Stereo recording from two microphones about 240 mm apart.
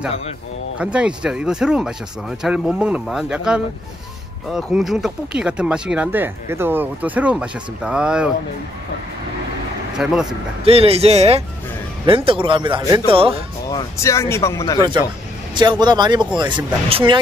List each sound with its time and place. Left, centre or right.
0.7 s speech: centre
10.0 s speech: centre
10.6 s speech: right
13.7 s speech: centre
14.8 s speech: centre